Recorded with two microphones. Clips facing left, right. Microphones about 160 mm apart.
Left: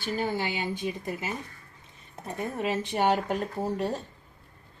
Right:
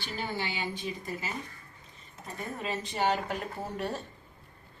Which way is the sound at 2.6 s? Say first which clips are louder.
Left 4 dB; 60° left (ahead or behind).